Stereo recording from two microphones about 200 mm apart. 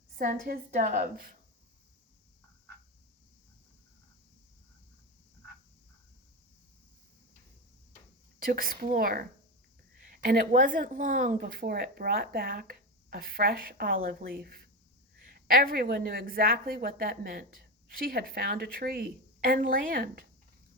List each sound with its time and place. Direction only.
0.2 s a woman's voice: 45° right (ahead or behind)
8.4 s a woman's voice: 45° right (ahead or behind)